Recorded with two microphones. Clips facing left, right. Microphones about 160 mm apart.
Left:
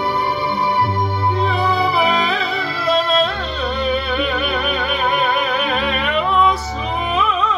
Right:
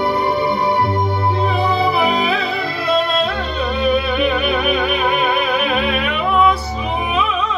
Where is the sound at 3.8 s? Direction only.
Centre (ahead or behind).